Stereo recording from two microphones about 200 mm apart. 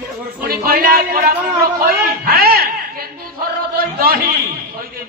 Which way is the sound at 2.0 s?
50° right (ahead or behind).